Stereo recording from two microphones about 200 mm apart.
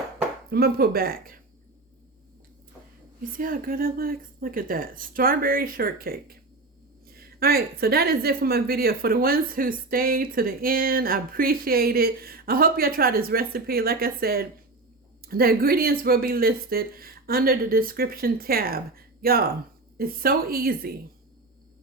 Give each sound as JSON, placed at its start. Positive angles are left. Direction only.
{"t": 0.5, "sound": "a woman's voice", "side_deg": -50}
{"t": 3.3, "sound": "a woman's voice", "side_deg": -45}